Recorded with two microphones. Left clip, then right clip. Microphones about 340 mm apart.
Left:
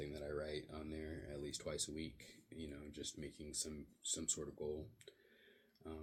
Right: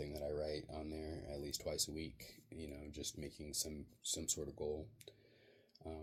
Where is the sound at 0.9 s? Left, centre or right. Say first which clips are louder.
Right 2 dB; right.